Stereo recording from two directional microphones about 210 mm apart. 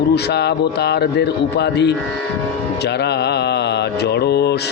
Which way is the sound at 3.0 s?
50° left (ahead or behind).